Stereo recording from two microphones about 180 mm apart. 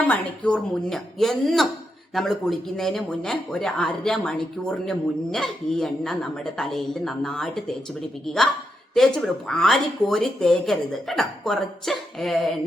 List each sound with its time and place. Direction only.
0.1 s speech: 5° left (ahead or behind)
9.0 s speech: 5° left (ahead or behind)